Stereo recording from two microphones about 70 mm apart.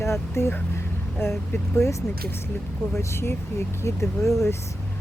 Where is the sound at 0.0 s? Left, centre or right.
Left.